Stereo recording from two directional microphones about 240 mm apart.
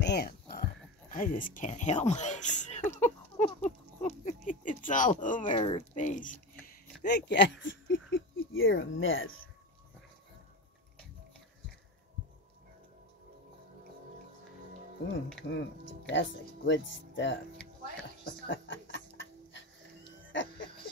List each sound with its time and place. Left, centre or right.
0.0 s a sound: left
5.5 s speech: left
7.0 s speech: left
15.4 s speech: left
18.2 s music: left
20.3 s a sound: left